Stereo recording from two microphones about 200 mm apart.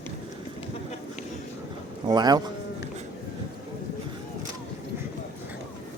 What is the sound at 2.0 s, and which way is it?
Speech, 20° right (ahead or behind).